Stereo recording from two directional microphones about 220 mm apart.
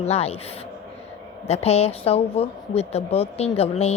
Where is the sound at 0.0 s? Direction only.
30° left (ahead or behind).